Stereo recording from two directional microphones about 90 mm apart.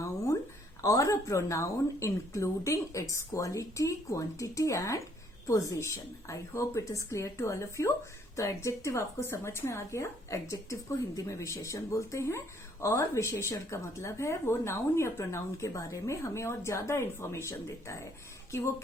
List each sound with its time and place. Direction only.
0.8 s a woman's voice: 35° left (ahead or behind)